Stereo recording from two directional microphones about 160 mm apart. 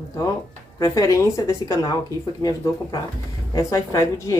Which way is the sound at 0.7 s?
20° left (ahead or behind).